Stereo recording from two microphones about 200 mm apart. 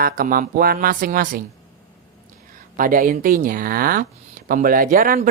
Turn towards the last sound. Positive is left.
turn(degrees=-45)  # may be behind; listen again after turning